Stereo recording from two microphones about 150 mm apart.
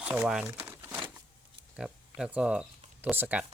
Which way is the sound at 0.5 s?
10° right (ahead or behind).